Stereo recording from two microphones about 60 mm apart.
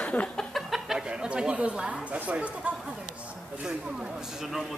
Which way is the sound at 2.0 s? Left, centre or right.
Right.